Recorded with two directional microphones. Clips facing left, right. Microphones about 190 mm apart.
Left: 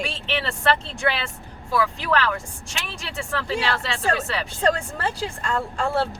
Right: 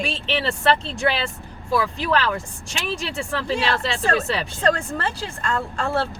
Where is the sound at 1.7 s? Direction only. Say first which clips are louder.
Right 1 dB; 25° right (ahead or behind).